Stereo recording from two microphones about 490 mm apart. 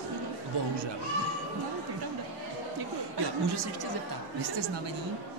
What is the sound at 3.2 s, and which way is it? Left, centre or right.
Speech, right.